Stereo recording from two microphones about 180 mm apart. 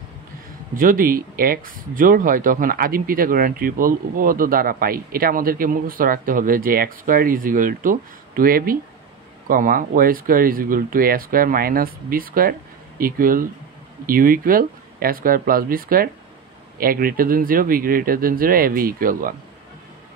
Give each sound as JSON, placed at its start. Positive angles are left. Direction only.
{"t": 0.7, "sound": "speech", "side_deg": -50}